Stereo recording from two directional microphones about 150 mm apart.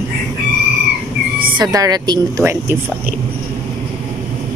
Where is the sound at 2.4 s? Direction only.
15° right (ahead or behind).